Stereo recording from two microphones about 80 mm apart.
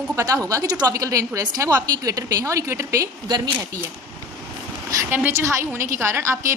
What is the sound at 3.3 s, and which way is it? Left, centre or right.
Speech, right.